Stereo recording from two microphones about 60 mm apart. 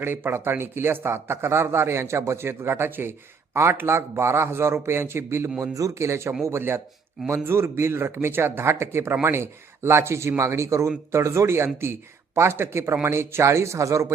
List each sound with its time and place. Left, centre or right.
0.0 s a man's voice: right
5.7 s a man's voice: right